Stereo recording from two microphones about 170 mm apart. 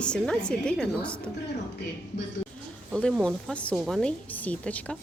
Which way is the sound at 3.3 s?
5° left (ahead or behind).